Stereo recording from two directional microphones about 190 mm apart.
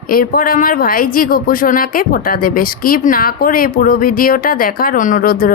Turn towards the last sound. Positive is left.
turn(degrees=50)  # may be behind; listen again after turning